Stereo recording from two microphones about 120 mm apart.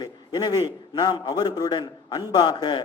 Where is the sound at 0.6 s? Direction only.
35° left (ahead or behind).